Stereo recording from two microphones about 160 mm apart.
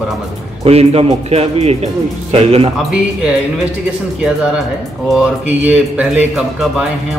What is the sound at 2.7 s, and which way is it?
Speech, 5° right (ahead or behind).